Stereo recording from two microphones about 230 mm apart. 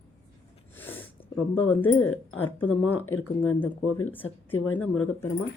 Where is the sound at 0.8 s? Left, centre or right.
Centre.